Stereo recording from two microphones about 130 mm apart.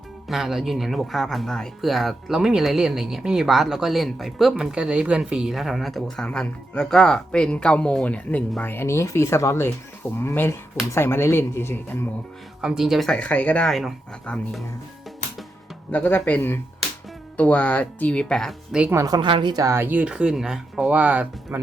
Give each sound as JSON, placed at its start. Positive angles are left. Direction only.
{"t": 0.3, "sound": "speech", "side_deg": 0}
{"t": 12.6, "sound": "speech", "side_deg": -5}
{"t": 15.9, "sound": "speech", "side_deg": 15}
{"t": 18.8, "sound": "speech", "side_deg": -20}